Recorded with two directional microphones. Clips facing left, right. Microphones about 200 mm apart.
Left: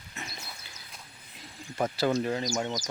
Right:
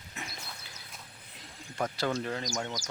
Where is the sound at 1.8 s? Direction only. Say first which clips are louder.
Left 5 dB; 5° left (ahead or behind).